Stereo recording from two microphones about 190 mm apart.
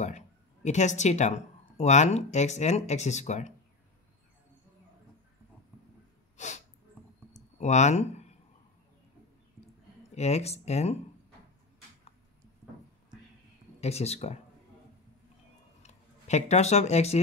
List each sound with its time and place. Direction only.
0.7 s speech: 40° left (ahead or behind)
6.3 s sneeze: 40° left (ahead or behind)
7.3 s a sound: 40° left (ahead or behind)
10.1 s speech: 35° left (ahead or behind)
13.7 s speech: 35° left (ahead or behind)
15.8 s speech: 35° left (ahead or behind)